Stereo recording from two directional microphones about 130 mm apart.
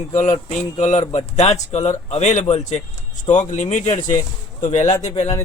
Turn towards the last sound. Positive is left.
turn(degrees=55)  # may be behind; listen again after turning